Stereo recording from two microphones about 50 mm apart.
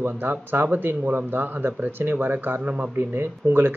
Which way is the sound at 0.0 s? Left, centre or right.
Right.